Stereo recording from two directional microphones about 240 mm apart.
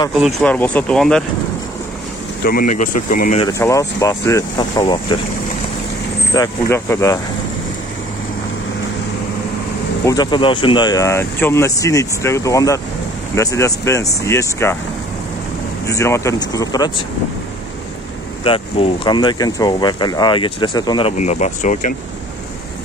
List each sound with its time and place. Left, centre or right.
0.1 s speech: centre
2.4 s speech: left
3.4 s speech: centre
6.3 s speech: centre
10.0 s speech: centre
15.9 s speech: centre
18.4 s speech: left
21.2 s speech: left